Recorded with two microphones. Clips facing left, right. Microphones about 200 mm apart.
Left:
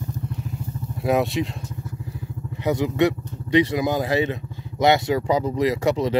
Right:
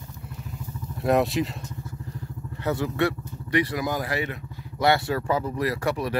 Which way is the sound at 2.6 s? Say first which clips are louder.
Left 5 dB; 15° left (ahead or behind).